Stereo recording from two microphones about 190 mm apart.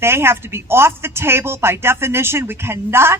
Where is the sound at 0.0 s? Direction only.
15° right (ahead or behind).